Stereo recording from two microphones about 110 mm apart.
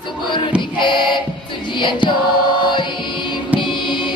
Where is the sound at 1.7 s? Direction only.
45° left (ahead or behind).